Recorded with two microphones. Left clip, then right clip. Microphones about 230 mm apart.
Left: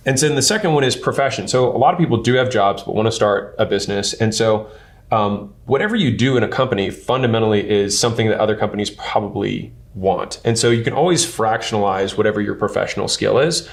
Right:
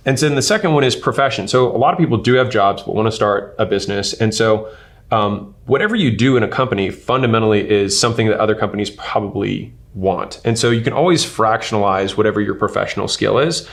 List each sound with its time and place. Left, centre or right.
0.0 s speech: right